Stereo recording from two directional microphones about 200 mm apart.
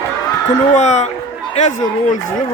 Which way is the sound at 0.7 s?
35° left (ahead or behind).